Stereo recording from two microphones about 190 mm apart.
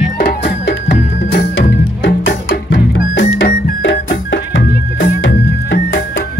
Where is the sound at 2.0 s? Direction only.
65° left (ahead or behind).